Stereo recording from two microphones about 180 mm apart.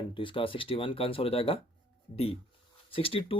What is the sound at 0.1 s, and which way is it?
Speech, 30° left (ahead or behind).